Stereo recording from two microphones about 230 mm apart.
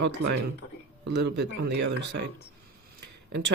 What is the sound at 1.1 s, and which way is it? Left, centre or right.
Speech, right.